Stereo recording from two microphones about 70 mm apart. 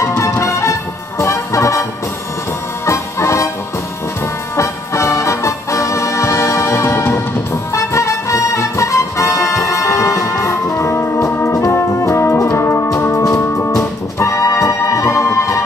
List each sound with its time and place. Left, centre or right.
0.0 s music: left
2.9 s music: left
4.6 s music: left